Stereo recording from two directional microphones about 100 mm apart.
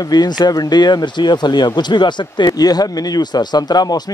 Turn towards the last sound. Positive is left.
turn(degrees=40)  # may be behind; listen again after turning